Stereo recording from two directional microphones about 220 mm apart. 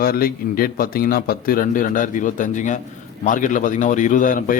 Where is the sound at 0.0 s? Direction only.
40° left (ahead or behind).